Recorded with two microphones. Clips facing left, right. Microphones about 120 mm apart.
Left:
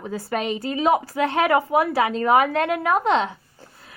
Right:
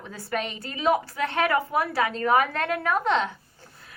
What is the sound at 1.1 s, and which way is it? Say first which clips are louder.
Speech: left 5 dB; 25° left (ahead or behind).